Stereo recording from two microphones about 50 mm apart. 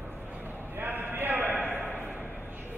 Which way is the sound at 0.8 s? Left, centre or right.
Right.